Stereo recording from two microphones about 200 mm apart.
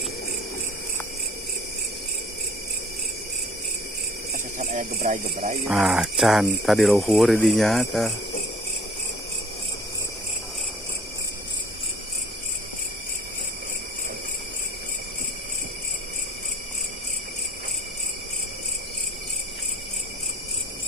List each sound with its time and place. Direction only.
4.6 s speech: 40° right (ahead or behind)
5.7 s speech: centre (ahead or behind)